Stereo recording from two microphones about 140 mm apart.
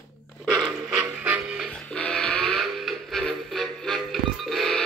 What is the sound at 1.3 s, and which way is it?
Music, 10° right (ahead or behind).